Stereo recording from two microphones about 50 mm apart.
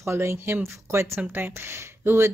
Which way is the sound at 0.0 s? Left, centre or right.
Right.